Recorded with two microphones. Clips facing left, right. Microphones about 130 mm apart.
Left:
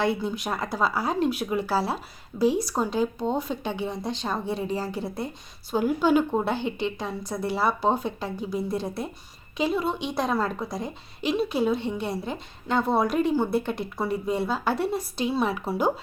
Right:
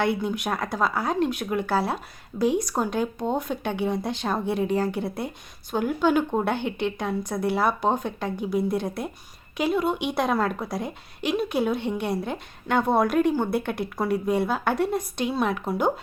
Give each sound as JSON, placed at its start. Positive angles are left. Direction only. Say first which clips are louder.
{"t": 0.0, "sound": "a woman's voice", "louder": "right 1 dB", "side_deg": 0}
{"t": 6.6, "sound": "speech", "louder": "even", "side_deg": -60}
{"t": 6.8, "sound": "a woman's voice", "louder": "right 3 dB", "side_deg": 0}